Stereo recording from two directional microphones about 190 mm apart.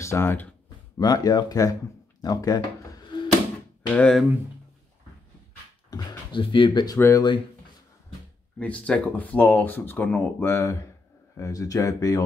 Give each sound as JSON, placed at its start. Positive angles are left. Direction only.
{"t": 0.0, "sound": "speech", "side_deg": 15}
{"t": 3.1, "sound": "a sound", "side_deg": 25}
{"t": 3.9, "sound": "speech", "side_deg": 5}
{"t": 5.9, "sound": "speech", "side_deg": 20}
{"t": 8.5, "sound": "speech", "side_deg": 5}